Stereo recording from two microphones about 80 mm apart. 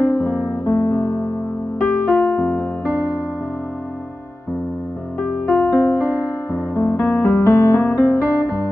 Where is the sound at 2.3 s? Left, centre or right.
Left.